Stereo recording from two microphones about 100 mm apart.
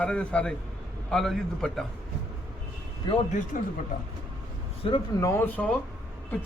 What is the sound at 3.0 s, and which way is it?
Speech, 45° left (ahead or behind).